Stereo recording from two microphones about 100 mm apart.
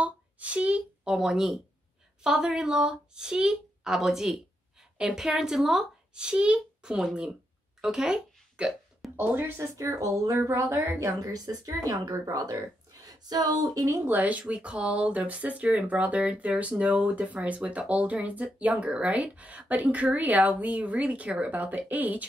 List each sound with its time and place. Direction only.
0.0 s a sound: 15° right (ahead or behind)
2.2 s speech: 5° right (ahead or behind)
7.8 s burping: 5° right (ahead or behind)
9.1 s speech: 20° right (ahead or behind)
9.8 s speech: 35° right (ahead or behind)
10.4 s speech: 20° right (ahead or behind)
11.0 s speech: 35° right (ahead or behind)
14.0 s speech: 15° right (ahead or behind)